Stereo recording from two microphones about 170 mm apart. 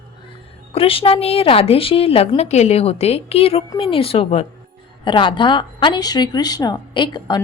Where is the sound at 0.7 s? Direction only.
35° left (ahead or behind).